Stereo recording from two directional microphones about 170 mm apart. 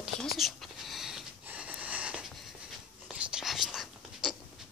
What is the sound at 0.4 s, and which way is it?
Wheeze, centre (ahead or behind).